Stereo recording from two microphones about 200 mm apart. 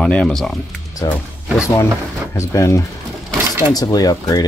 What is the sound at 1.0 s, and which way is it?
Speech, 15° left (ahead or behind).